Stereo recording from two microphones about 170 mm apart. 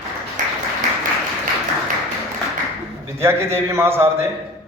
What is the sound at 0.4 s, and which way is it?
Applause, 45° right (ahead or behind).